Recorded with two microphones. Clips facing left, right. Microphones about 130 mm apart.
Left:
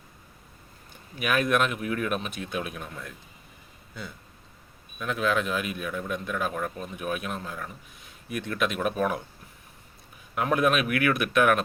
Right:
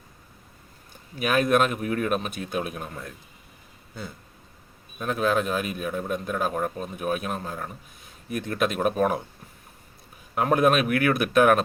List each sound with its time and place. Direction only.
1.2 s a man's voice: 35° right (ahead or behind)
4.9 s a man's voice: 40° right (ahead or behind)
10.3 s a man's voice: 40° right (ahead or behind)